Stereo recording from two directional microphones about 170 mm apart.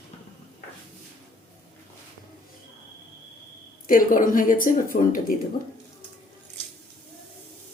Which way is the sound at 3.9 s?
55° left (ahead or behind).